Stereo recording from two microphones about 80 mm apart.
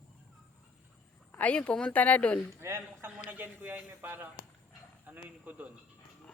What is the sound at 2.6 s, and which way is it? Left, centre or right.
A man's voice, right.